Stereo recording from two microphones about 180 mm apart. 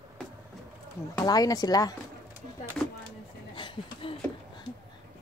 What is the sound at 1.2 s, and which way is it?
Speech, 20° left (ahead or behind).